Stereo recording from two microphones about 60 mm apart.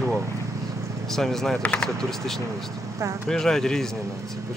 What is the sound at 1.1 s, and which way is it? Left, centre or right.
Speech, centre.